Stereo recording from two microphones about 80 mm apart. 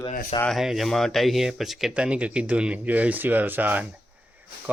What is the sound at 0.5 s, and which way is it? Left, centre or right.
Speech, centre.